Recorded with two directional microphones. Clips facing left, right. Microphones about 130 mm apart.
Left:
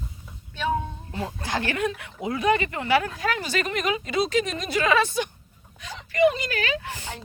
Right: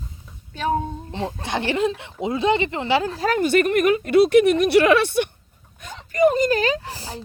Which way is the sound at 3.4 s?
55° right (ahead or behind).